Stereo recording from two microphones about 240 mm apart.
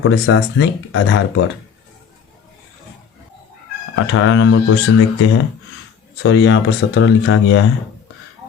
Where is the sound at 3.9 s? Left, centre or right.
Left.